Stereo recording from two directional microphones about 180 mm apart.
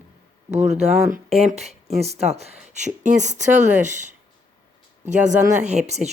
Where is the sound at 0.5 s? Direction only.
40° right (ahead or behind).